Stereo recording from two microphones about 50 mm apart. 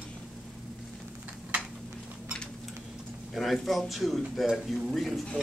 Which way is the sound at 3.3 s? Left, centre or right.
Centre.